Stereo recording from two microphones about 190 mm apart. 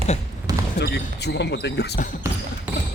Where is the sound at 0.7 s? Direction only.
60° left (ahead or behind).